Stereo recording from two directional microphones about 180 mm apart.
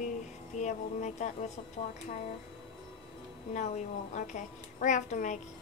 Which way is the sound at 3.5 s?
40° left (ahead or behind).